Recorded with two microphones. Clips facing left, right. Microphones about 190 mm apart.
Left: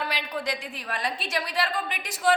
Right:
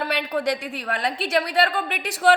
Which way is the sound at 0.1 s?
60° right (ahead or behind).